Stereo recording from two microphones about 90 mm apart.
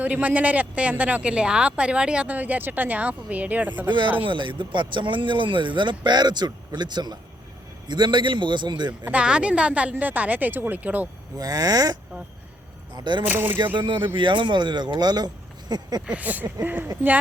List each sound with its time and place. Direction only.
0.0 s speech: 15° right (ahead or behind)
3.8 s speech: 65° right (ahead or behind)
9.0 s speech: 15° right (ahead or behind)
11.3 s speech: 45° right (ahead or behind)
13.0 s speech: 60° right (ahead or behind)
13.2 s speech: 20° right (ahead or behind)
14.2 s speech: 65° right (ahead or behind); by 16.0 s 45° right (ahead or behind)
16.0 s speech: 15° right (ahead or behind)